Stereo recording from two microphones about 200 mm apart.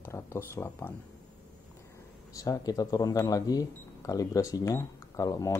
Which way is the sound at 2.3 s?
15° left (ahead or behind).